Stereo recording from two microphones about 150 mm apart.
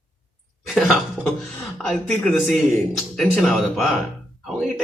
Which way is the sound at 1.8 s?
5° left (ahead or behind).